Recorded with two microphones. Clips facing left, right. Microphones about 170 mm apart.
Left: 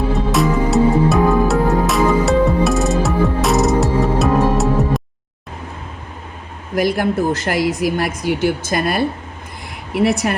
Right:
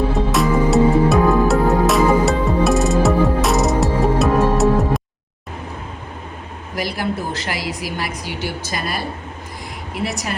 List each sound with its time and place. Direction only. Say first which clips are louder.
0.3 s music: left 1 dB; centre (ahead or behind)
6.7 s a woman's voice: left 7 dB; 50° left (ahead or behind)